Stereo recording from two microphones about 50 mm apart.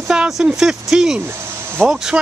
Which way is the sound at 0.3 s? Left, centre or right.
Centre.